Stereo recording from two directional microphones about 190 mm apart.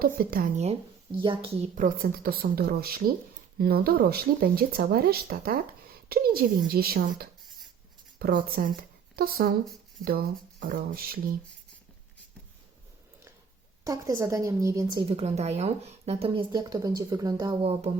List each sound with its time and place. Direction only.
0.0 s speech: 50° right (ahead or behind); by 1.4 s 25° right (ahead or behind)
1.7 s speech: 50° right (ahead or behind)
13.8 s a woman's voice: 15° right (ahead or behind)
15.2 s speech: 35° right (ahead or behind); by 17.5 s 20° right (ahead or behind)
17.6 s speech: 30° right (ahead or behind)